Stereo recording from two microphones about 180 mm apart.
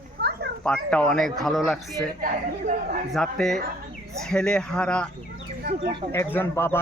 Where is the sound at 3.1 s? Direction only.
5° left (ahead or behind).